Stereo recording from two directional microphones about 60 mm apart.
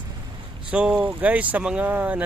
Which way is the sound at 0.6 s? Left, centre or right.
Centre.